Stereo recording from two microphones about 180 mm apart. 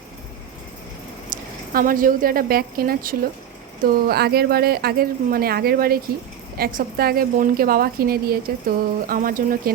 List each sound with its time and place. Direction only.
1.3 s a woman's voice: 50° right (ahead or behind)